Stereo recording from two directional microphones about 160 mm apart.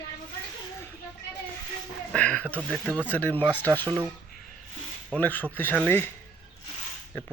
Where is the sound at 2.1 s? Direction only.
10° left (ahead or behind).